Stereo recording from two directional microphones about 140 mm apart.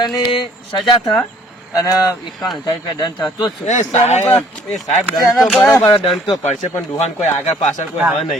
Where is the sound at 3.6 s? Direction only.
55° left (ahead or behind).